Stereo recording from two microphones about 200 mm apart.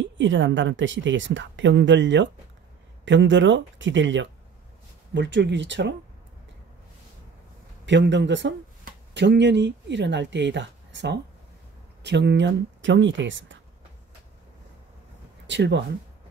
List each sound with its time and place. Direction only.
0.0 s speech: 70° right (ahead or behind)
7.8 s speech: 65° right (ahead or behind)
15.4 s speech: 60° right (ahead or behind)